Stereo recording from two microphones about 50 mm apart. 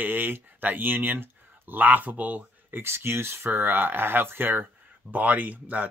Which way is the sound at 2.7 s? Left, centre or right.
Right.